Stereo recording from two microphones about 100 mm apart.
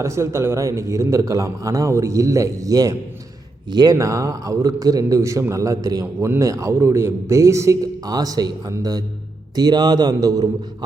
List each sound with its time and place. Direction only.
0.0 s a man's voice: 30° right (ahead or behind); by 3.9 s 45° right (ahead or behind)
3.9 s a man's voice: 30° right (ahead or behind)